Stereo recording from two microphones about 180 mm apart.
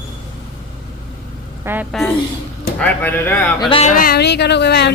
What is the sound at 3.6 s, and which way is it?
Speech, 30° left (ahead or behind).